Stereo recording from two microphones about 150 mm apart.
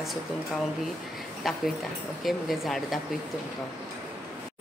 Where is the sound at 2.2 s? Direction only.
Centre (ahead or behind).